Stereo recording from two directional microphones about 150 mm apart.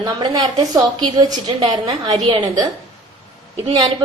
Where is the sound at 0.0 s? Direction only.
30° right (ahead or behind).